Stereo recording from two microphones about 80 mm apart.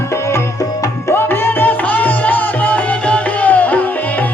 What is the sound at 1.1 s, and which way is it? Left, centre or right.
Music, left.